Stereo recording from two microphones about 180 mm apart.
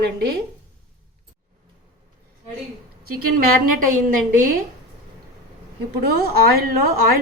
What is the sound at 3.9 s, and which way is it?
Speech, 45° right (ahead or behind).